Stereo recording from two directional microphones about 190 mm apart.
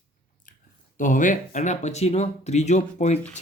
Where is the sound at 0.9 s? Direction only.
45° left (ahead or behind).